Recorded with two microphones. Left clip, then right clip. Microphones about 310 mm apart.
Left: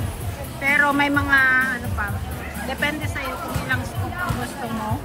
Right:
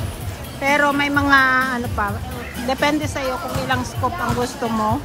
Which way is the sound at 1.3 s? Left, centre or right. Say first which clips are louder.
Right 3 dB; centre.